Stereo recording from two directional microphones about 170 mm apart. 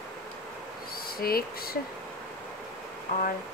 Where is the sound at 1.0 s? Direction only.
60° left (ahead or behind).